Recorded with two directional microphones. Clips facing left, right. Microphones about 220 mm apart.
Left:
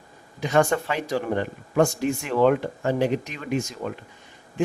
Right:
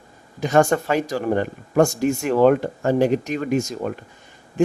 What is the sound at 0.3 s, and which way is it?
Speech, 45° right (ahead or behind).